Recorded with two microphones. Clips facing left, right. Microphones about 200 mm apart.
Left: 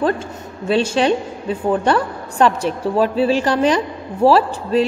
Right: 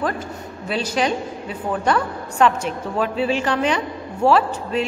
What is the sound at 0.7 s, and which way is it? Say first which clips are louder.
A woman's voice: left 6 dB; 30° left (ahead or behind).